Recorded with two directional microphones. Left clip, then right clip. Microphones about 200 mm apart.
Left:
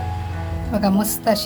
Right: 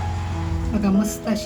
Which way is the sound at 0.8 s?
40° left (ahead or behind).